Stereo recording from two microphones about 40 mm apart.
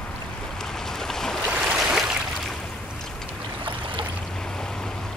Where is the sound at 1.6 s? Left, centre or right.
Centre.